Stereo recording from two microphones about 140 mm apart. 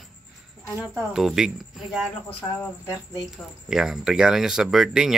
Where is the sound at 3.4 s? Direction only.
5° right (ahead or behind).